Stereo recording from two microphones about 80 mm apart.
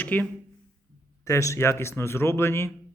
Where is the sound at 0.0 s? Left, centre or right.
Left.